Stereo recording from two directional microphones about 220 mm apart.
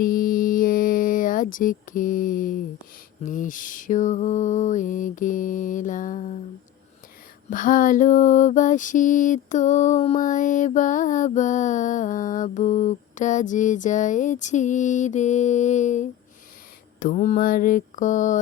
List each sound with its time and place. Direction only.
0.0 s a sound: 40° left (ahead or behind)
3.2 s mantra: 35° left (ahead or behind)
7.5 s mantra: 40° left (ahead or behind)